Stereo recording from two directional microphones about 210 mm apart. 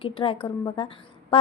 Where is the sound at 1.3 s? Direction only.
25° left (ahead or behind).